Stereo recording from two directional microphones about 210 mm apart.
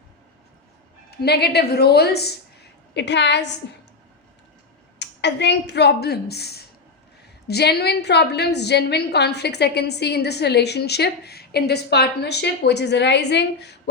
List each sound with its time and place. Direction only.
1.1 s a woman's voice: 50° left (ahead or behind)
4.9 s a woman's voice: 55° left (ahead or behind)